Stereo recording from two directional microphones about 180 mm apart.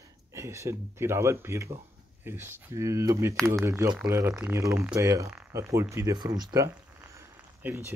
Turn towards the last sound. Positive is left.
turn(degrees=-15)  # may be behind; listen again after turning